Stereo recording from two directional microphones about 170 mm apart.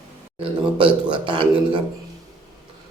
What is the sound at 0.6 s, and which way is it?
A man's voice, 30° right (ahead or behind).